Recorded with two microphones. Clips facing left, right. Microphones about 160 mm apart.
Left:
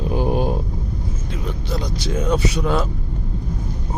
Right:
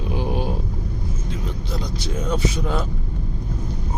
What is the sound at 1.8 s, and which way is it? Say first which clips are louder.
Speech: left 4 dB; 80° left.